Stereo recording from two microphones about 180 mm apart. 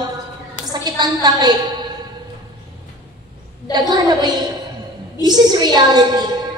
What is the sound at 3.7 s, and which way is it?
A woman's voice, 25° right (ahead or behind).